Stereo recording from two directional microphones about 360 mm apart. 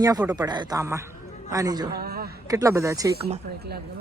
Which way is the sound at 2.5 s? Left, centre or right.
Centre.